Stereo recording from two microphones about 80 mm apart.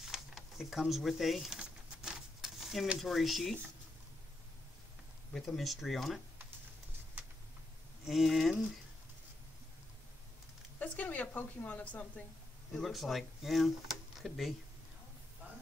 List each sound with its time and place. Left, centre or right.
0.1 s speech: centre
1.6 s a sound: centre
3.0 s speech: centre
5.3 s speech: centre
7.2 s a sound: right
8.1 s speech: centre
10.8 s a woman's voice: centre
12.7 s speech: centre